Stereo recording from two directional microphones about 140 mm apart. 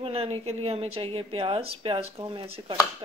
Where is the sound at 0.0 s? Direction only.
45° right (ahead or behind).